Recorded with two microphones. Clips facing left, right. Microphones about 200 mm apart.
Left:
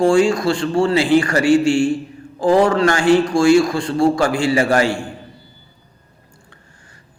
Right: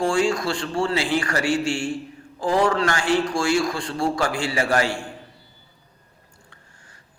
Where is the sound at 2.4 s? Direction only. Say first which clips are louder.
Left 7 dB; 45° left (ahead or behind).